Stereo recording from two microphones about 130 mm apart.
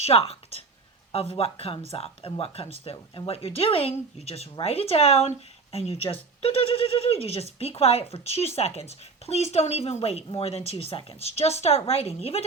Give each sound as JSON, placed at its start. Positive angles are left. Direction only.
{"t": 0.0, "sound": "speech", "side_deg": 50}